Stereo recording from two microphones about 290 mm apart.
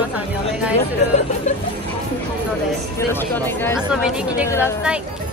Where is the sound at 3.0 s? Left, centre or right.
Centre.